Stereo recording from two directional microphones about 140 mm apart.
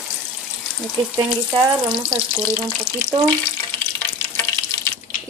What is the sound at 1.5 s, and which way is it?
Frying, 40° right (ahead or behind).